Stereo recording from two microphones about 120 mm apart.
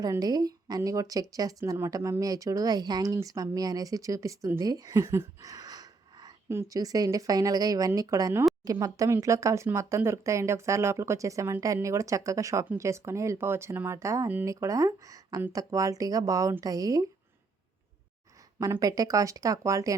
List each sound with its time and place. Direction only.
0.0 s speech: 30° right (ahead or behind)
18.6 s speech: 30° right (ahead or behind)